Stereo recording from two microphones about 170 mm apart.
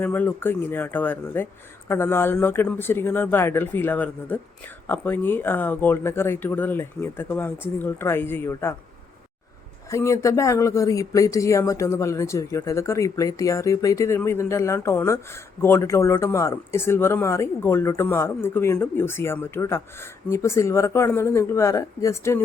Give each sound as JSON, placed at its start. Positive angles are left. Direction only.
{"t": 0.0, "sound": "speech", "side_deg": 10}
{"t": 9.9, "sound": "speech", "side_deg": 20}